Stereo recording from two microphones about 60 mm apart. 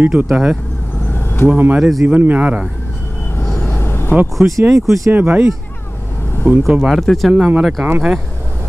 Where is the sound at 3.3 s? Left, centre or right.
Left.